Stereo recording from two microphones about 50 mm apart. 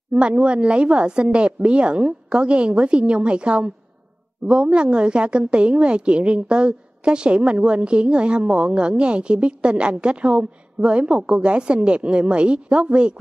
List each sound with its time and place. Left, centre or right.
0.1 s a woman's voice: right